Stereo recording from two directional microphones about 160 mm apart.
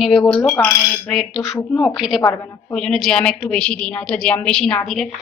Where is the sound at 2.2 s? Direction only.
20° left (ahead or behind).